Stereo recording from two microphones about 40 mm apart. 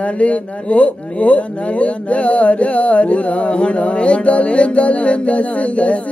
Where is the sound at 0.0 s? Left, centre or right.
Left.